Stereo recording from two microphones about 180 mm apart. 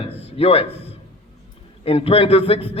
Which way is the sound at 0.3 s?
35° left (ahead or behind).